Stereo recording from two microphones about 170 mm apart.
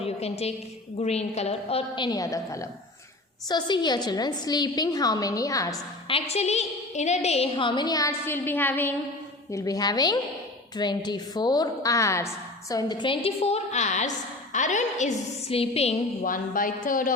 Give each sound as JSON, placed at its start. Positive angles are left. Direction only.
{"t": 0.0, "sound": "a sound", "side_deg": 40}
{"t": 0.9, "sound": "a woman's voice", "side_deg": 40}
{"t": 2.0, "sound": "a woman's voice", "side_deg": 20}
{"t": 6.1, "sound": "a woman's voice", "side_deg": 35}
{"t": 16.2, "sound": "a woman's voice", "side_deg": 55}